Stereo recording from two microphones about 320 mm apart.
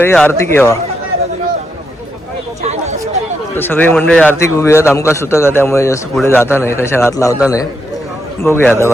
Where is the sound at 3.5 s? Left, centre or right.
Centre.